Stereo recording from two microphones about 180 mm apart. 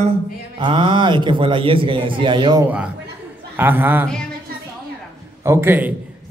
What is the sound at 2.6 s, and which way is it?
A man's voice, 5° right (ahead or behind).